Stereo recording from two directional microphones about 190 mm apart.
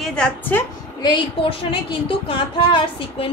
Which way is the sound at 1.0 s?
25° left (ahead or behind).